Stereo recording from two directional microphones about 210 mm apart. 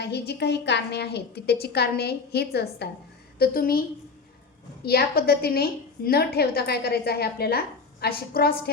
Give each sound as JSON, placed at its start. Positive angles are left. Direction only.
{"t": 0.0, "sound": "a woman's voice", "side_deg": 50}